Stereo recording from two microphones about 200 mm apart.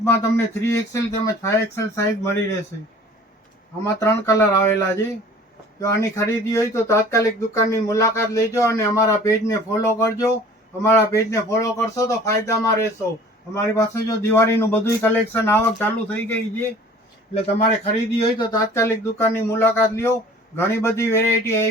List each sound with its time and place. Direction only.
0.0 s speech: 15° left (ahead or behind)
3.8 s speech: 15° left (ahead or behind)
6.0 s speech: 15° left (ahead or behind)
17.3 s speech: 30° left (ahead or behind)
18.2 s speech: 20° left (ahead or behind)